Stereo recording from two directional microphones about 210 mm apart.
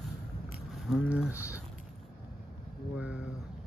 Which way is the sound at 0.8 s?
5° right (ahead or behind).